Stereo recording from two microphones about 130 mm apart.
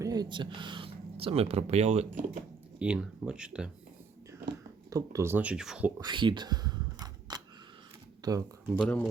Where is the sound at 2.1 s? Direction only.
90° right.